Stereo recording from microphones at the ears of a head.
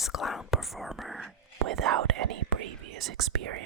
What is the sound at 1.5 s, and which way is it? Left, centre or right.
Speech, right.